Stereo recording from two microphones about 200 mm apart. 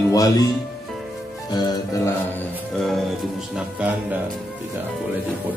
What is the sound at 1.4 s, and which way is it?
Music, 20° left (ahead or behind).